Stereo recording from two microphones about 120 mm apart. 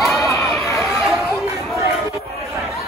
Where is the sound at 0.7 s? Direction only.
25° left (ahead or behind).